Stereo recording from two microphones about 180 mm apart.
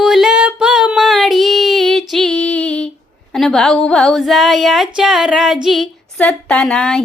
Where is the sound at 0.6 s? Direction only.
5° right (ahead or behind).